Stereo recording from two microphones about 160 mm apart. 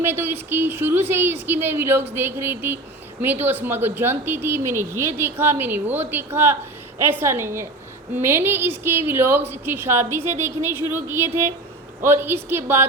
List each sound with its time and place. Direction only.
0.0 s speech: 15° right (ahead or behind)